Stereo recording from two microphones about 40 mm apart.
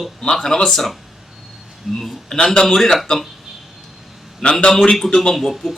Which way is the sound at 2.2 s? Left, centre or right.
Centre.